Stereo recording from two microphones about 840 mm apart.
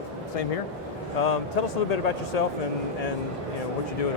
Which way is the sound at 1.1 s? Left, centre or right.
Left.